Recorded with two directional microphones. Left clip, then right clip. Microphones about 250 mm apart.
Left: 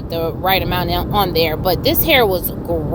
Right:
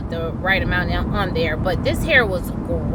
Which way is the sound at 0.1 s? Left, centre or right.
Left.